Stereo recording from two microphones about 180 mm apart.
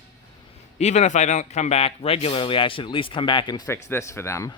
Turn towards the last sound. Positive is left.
turn(degrees=15)  # may be behind; listen again after turning